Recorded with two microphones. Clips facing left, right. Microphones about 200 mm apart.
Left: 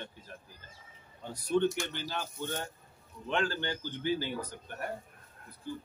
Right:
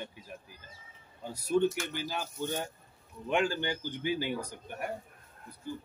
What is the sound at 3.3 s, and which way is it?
A man's voice, 15° right (ahead or behind).